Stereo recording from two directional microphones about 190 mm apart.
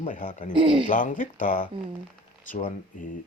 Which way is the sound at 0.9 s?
45° left (ahead or behind).